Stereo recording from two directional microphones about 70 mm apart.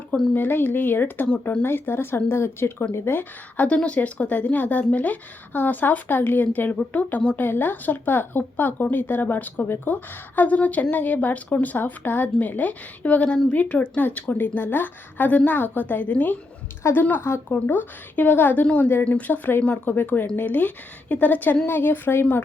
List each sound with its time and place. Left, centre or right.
0.3 s speech: left
3.7 s speech: centre